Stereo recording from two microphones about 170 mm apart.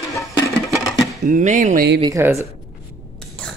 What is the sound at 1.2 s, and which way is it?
Speech, 45° right (ahead or behind).